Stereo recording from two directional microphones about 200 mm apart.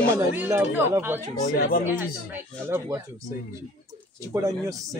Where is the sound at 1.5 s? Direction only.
50° left (ahead or behind).